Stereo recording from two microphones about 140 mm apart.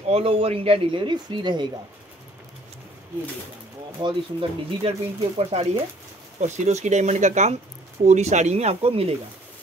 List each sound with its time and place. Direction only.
0.1 s speech: 45° right (ahead or behind)
4.0 s speech: 40° right (ahead or behind)
6.4 s speech: 55° right (ahead or behind)